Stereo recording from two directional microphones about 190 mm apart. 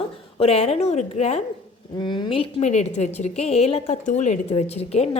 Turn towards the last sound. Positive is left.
turn(degrees=35)  # may be behind; listen again after turning